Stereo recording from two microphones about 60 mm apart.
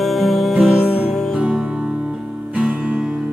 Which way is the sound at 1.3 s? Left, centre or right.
Centre.